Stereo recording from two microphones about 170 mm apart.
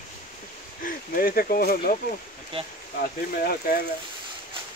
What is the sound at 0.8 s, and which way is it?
Speech, 55° left (ahead or behind).